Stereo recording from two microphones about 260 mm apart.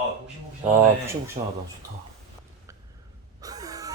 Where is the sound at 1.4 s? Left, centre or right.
Right.